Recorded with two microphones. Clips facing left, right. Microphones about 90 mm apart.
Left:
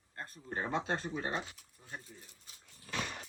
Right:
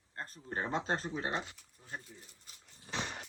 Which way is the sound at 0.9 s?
30° right (ahead or behind).